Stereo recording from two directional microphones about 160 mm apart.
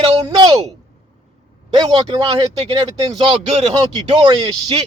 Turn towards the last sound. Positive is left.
turn(degrees=-30)  # may be behind; listen again after turning